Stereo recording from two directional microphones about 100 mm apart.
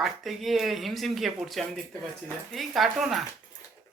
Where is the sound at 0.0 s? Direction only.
Centre (ahead or behind).